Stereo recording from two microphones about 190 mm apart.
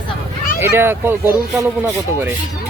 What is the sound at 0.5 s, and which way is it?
Speech, 10° right (ahead or behind).